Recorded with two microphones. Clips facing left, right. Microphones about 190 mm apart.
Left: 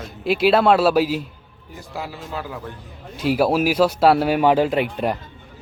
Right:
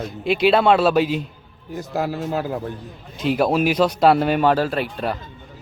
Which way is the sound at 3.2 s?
5° left (ahead or behind).